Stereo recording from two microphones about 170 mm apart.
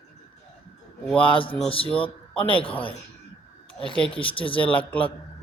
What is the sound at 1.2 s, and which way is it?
Speech, 30° left (ahead or behind).